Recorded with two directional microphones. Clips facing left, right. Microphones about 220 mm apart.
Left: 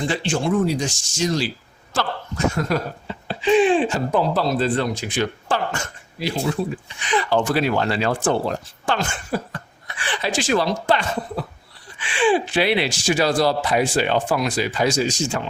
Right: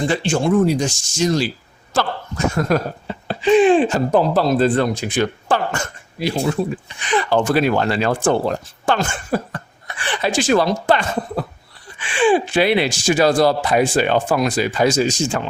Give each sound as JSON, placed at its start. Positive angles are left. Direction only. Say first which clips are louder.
{"t": 0.1, "sound": "speech", "louder": "right 4 dB", "side_deg": -50}
{"t": 2.6, "sound": "speech", "louder": "right 4 dB", "side_deg": -45}